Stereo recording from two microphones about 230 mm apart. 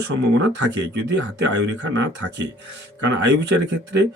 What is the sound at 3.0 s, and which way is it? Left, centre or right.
A man's voice, right.